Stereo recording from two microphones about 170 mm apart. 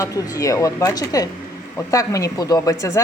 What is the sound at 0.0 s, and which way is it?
A woman's voice, 20° left (ahead or behind).